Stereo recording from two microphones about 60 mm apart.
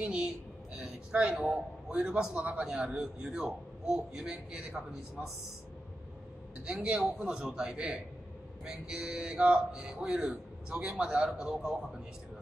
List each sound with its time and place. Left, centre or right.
0.0 s a woman's voice: centre
0.7 s a sound: centre
1.3 s a man's voice: centre
6.6 s a man's voice: centre